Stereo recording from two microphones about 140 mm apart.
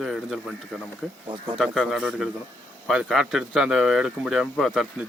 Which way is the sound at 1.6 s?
Centre (ahead or behind).